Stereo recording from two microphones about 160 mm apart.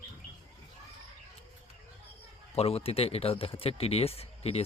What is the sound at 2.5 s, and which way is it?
Speech, 40° left (ahead or behind).